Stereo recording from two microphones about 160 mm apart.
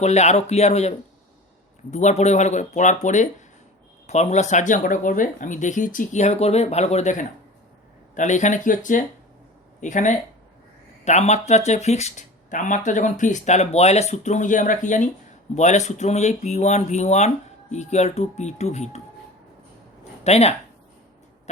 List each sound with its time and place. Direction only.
0.0 s speech: 45° left (ahead or behind)
20.2 s speech: 40° left (ahead or behind)